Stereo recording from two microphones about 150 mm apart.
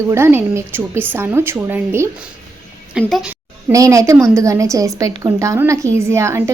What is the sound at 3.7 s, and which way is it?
A woman's voice, 20° right (ahead or behind).